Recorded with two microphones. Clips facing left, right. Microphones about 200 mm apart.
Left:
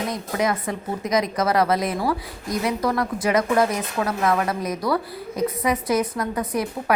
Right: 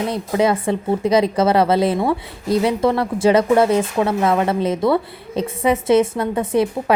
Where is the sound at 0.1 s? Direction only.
30° right (ahead or behind).